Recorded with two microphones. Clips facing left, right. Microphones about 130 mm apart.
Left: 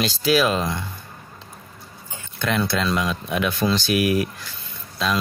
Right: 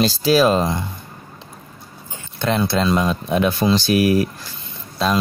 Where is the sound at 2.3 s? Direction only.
30° right (ahead or behind).